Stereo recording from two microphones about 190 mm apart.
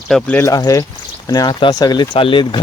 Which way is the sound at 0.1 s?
5° left (ahead or behind).